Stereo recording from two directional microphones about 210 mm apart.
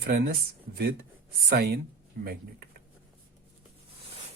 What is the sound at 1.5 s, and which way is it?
Speech, 50° right (ahead or behind).